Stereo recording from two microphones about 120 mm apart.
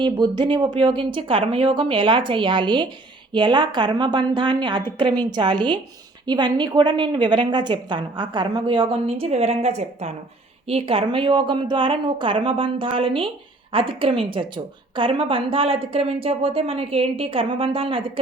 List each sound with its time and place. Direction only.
0.0 s a woman's voice: 40° right (ahead or behind); by 10.1 s 65° right (ahead or behind)
10.7 s a woman's voice: 55° right (ahead or behind)